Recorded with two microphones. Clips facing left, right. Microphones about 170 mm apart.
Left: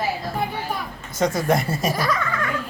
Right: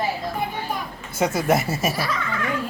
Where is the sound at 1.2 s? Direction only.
5° right (ahead or behind).